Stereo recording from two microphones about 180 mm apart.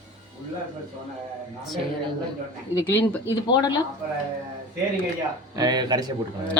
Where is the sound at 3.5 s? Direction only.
25° left (ahead or behind).